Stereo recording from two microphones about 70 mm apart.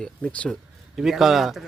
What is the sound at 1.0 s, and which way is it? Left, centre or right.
Speech, centre.